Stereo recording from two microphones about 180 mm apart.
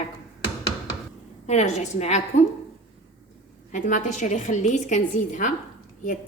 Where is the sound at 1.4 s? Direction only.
40° left (ahead or behind).